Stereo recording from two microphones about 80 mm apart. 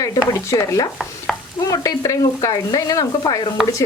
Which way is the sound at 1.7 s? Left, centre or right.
Left.